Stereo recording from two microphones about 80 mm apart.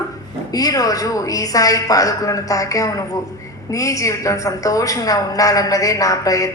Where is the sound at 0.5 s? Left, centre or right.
Left.